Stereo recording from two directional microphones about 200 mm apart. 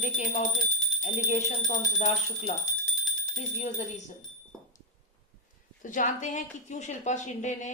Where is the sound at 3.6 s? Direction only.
35° left (ahead or behind).